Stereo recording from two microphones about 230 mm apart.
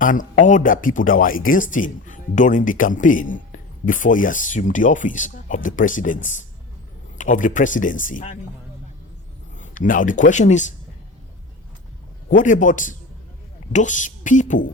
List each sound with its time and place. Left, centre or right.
0.0 s speech: left
7.2 s speech: left
9.6 s speech: left
12.3 s speech: left